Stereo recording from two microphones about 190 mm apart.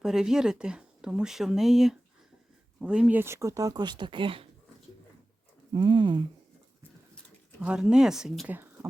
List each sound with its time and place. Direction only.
0.0 s speech: 5° right (ahead or behind); by 4.4 s 25° right (ahead or behind)
5.7 s speech: 25° right (ahead or behind)
7.6 s speech: 5° right (ahead or behind)